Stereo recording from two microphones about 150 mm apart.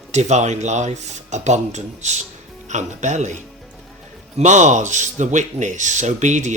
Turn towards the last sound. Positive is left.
turn(degrees=-50)  # may be behind; listen again after turning